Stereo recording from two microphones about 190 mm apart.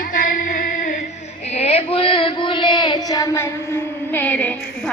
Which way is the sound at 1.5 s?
30° left (ahead or behind).